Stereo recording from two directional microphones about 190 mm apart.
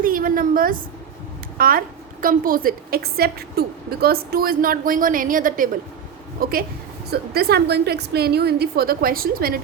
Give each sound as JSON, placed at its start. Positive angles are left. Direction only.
{"t": 0.0, "sound": "a woman's voice", "side_deg": -45}